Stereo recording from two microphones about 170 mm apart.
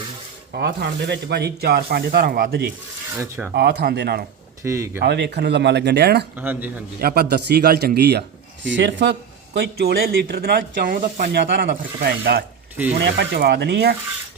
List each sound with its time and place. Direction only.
0.5 s speech: 75° right (ahead or behind)
3.1 s filing: 15° right (ahead or behind)
3.5 s speech: 80° right
4.6 s filing: 15° right (ahead or behind)
4.9 s speech: 90° right
6.3 s filing: 10° right (ahead or behind)
7.0 s speech: 65° right (ahead or behind)
8.6 s speech: 90° right
9.6 s speech: 70° right (ahead or behind)